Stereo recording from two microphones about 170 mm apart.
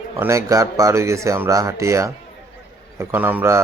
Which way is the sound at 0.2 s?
15° right (ahead or behind).